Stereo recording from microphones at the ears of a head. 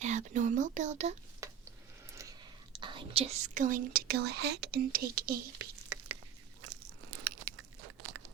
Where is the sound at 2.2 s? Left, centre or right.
Right.